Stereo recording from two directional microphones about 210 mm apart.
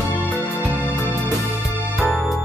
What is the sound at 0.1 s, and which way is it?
Music, 5° left (ahead or behind).